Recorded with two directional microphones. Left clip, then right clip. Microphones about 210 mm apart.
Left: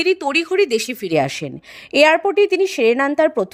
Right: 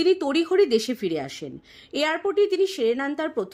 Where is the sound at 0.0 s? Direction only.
30° left (ahead or behind).